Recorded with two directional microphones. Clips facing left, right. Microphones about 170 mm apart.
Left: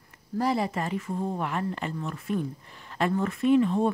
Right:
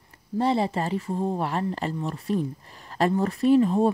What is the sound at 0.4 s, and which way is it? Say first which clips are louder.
Speech: right 3 dB; 30° right (ahead or behind).